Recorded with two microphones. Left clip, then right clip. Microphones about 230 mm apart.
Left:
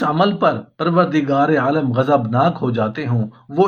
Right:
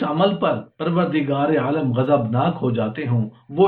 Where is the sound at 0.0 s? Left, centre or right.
Left.